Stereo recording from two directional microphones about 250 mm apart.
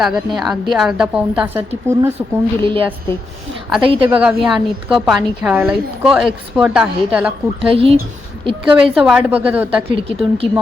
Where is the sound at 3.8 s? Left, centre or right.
Right.